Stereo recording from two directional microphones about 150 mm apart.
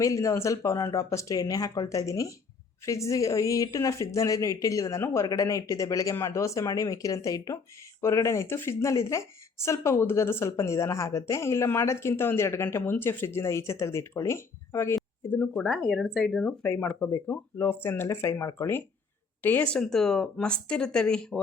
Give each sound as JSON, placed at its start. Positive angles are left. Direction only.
{"t": 0.0, "sound": "speech", "side_deg": 20}